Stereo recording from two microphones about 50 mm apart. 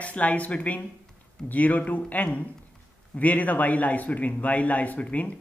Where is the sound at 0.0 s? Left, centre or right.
Left.